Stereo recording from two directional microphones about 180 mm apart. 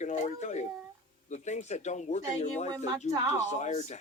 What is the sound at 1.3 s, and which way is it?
Speech, 40° left (ahead or behind).